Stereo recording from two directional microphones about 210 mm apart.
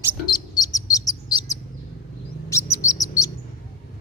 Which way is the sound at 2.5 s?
15° left (ahead or behind).